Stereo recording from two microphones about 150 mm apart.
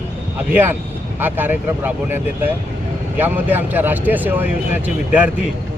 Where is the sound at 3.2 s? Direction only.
10° right (ahead or behind).